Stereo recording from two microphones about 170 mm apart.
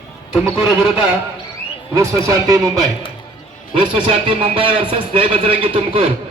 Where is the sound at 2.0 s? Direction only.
20° right (ahead or behind).